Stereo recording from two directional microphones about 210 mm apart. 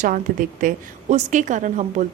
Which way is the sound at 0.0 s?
40° right (ahead or behind).